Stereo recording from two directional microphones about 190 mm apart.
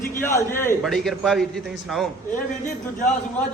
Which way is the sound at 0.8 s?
Centre (ahead or behind).